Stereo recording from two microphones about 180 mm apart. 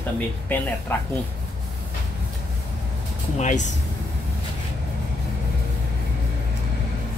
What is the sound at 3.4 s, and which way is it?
Speech, 40° left (ahead or behind).